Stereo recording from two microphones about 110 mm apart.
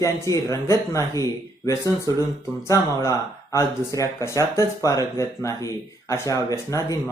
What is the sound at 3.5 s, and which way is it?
Speech, 30° left (ahead or behind).